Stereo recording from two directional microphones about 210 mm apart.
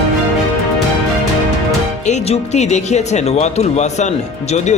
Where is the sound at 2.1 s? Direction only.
30° left (ahead or behind).